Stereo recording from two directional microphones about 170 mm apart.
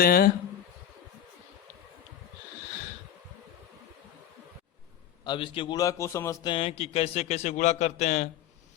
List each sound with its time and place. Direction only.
0.0 s speech: 60° left (ahead or behind)
5.2 s a man's voice: 30° left (ahead or behind)
6.5 s a man's voice: 30° left (ahead or behind)